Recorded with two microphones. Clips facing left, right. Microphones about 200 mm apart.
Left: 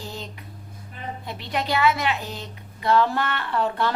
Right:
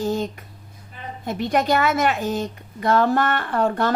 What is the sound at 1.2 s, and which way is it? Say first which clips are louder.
A woman's voice: right 9 dB; 45° right (ahead or behind).